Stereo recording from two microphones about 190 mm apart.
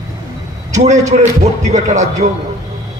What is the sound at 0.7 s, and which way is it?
Speech, 40° right (ahead or behind).